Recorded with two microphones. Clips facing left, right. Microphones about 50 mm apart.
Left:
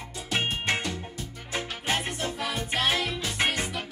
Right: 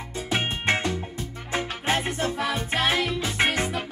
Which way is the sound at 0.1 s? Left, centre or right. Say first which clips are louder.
Right 2 dB; centre.